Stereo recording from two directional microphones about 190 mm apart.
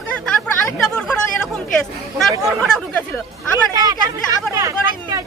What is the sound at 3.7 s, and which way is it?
Speech, 20° right (ahead or behind).